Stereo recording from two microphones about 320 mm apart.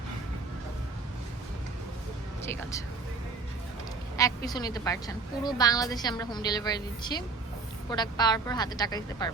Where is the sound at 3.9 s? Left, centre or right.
Centre.